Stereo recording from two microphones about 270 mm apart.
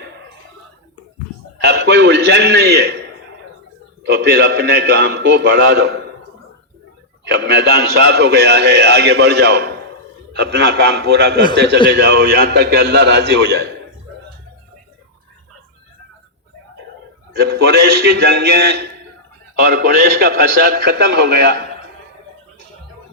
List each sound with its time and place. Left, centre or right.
1.6 s a man's voice: right
7.3 s a man's voice: right
17.3 s a man's voice: right